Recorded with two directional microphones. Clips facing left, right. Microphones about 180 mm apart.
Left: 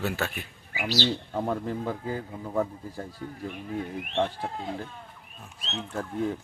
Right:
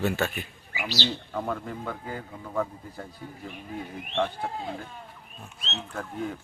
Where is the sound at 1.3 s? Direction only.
25° left (ahead or behind).